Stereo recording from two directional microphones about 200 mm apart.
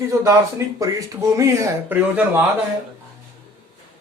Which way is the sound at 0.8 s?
15° right (ahead or behind).